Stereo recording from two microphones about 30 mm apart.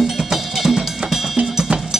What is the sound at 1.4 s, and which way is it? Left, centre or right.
Drum, right.